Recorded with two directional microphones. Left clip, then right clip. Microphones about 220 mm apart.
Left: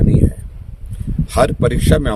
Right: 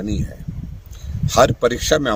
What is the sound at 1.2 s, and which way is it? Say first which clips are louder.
Speech: right 1 dB; 5° left (ahead or behind).